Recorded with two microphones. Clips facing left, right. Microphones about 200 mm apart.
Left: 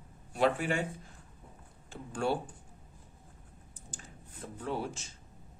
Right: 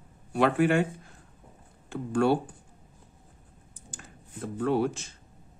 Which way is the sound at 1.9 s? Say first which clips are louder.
Right 8 dB; 60° right (ahead or behind).